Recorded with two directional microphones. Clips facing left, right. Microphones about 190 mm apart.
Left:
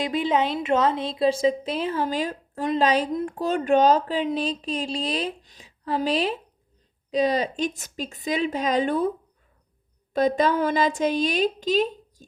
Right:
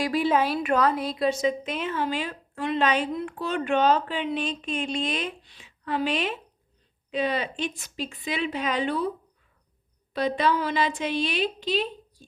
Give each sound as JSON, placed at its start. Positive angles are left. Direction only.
{"t": 0.0, "sound": "a woman's voice", "side_deg": 20}